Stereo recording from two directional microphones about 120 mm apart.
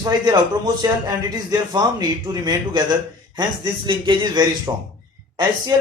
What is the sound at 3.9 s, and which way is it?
Speech, 40° right (ahead or behind).